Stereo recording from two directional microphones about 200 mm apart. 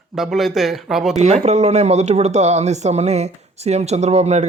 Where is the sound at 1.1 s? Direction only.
35° right (ahead or behind).